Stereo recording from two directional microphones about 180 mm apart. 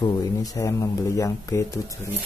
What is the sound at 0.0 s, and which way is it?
Speech, 20° left (ahead or behind).